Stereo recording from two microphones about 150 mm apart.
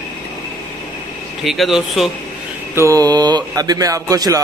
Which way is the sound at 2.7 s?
20° right (ahead or behind).